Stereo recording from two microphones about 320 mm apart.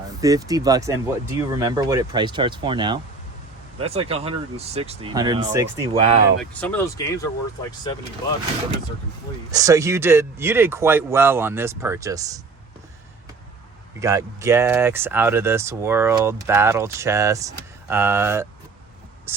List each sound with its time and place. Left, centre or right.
0.2 s speech: centre
6.4 s speech: centre
9.5 s speech: centre
14.0 s speech: centre